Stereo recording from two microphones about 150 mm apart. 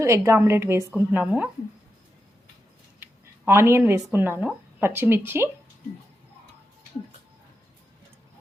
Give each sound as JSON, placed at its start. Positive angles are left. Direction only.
{"t": 0.0, "sound": "a woman's voice", "side_deg": -20}
{"t": 3.0, "sound": "speech", "side_deg": -15}